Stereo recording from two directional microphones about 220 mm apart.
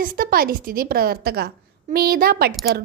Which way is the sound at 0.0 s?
40° right (ahead or behind).